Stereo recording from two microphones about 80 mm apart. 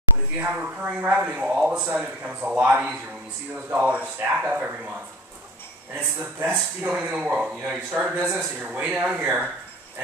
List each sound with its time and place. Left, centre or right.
0.4 s a man's voice: centre
5.9 s a man's voice: right